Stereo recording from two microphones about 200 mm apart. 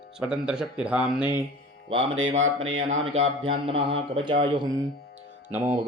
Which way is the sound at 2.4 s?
75° right (ahead or behind).